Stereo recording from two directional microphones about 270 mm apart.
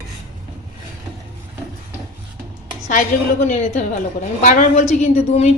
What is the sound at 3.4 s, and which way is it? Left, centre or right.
A woman's voice, left.